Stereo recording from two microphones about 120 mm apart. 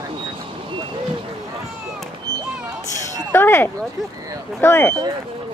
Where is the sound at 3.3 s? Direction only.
20° left (ahead or behind).